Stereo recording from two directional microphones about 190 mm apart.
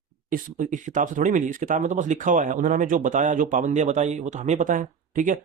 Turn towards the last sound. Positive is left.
turn(degrees=-45)  # may be behind; listen again after turning